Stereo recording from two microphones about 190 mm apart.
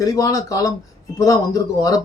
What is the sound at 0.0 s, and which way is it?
Speech, 15° left (ahead or behind).